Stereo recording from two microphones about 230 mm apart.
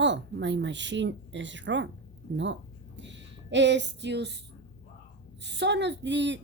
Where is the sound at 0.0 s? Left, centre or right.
Right.